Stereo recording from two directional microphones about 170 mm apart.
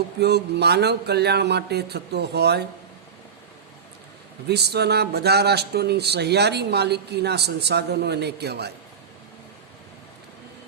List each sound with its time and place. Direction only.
0.2 s speech: 75° right (ahead or behind)
4.4 s speech: 75° right (ahead or behind)